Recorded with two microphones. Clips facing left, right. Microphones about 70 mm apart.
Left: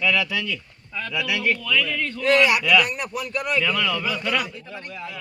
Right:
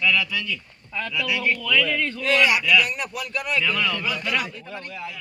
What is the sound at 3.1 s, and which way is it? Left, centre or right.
Speech, left.